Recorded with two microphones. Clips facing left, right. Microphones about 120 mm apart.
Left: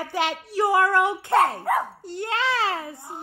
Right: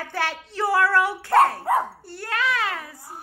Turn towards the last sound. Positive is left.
turn(degrees=25)  # may be behind; listen again after turning